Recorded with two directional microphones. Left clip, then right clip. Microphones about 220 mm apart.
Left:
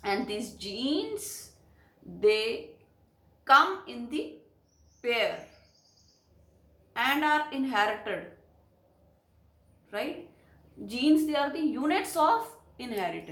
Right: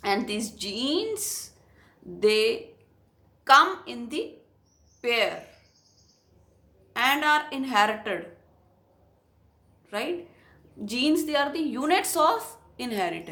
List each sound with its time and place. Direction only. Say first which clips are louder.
0.0 s a woman's voice: right 4 dB; 50° right (ahead or behind)
6.9 s a woman's voice: right 4 dB; 50° right (ahead or behind)
10.8 s a woman's voice: even; 45° right (ahead or behind)